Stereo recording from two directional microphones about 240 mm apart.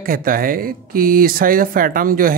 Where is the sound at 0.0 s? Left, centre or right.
Right.